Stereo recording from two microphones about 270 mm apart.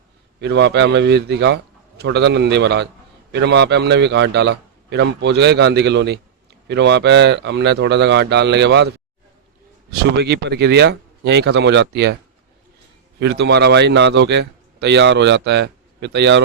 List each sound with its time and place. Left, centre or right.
0.3 s a man's voice: right
9.9 s a man's voice: right
13.1 s a man's voice: right